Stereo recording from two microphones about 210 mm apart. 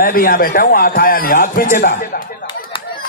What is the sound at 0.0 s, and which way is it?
A man's voice, 45° left (ahead or behind).